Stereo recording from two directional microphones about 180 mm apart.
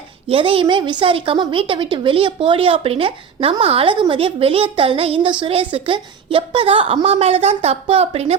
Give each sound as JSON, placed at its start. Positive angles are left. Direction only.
{"t": 0.3, "sound": "a woman's voice", "side_deg": -30}